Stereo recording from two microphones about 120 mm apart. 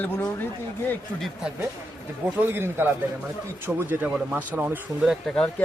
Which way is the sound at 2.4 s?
20° right (ahead or behind).